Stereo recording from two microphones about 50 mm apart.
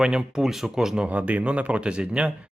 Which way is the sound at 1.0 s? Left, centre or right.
Right.